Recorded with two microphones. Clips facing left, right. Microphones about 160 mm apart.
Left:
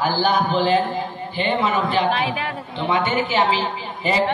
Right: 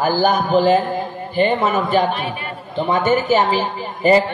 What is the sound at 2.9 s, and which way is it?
A man's voice, 45° right (ahead or behind).